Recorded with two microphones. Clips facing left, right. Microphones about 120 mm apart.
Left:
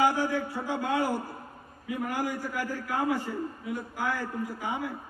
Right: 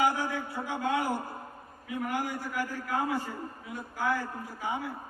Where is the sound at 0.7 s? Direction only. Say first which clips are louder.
Left 1 dB; 15° right (ahead or behind).